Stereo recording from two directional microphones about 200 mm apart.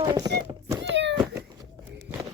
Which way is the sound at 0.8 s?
60° right (ahead or behind).